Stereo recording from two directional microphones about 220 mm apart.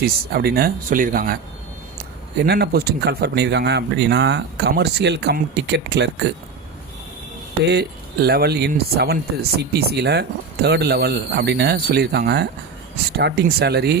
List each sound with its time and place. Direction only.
0.0 s speech: 45° right (ahead or behind)
7.7 s speech: 45° right (ahead or behind)